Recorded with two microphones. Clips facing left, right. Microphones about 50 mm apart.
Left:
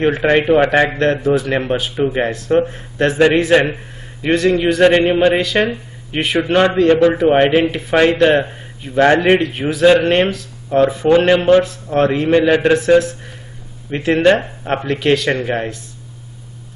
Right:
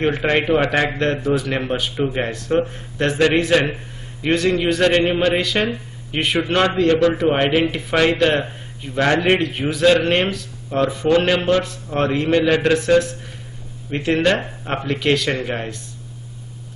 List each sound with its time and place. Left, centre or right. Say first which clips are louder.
0.0 s a man's voice: left 4 dB; centre
4.2 s a man's voice: left 4 dB; centre
6.4 s a man's voice: left 5 dB; centre
12.7 s speech: left 4 dB; centre